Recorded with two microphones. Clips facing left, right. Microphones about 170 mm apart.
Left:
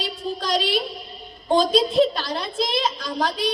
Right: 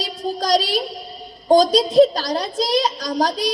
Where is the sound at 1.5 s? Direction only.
40° right (ahead or behind).